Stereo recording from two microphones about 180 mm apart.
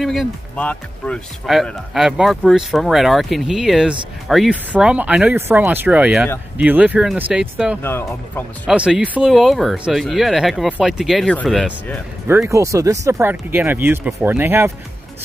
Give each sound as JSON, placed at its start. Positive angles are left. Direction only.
{"t": 0.0, "sound": "speech", "side_deg": 0}
{"t": 7.8, "sound": "speech", "side_deg": 10}
{"t": 8.6, "sound": "speech", "side_deg": -5}
{"t": 12.3, "sound": "speech", "side_deg": -15}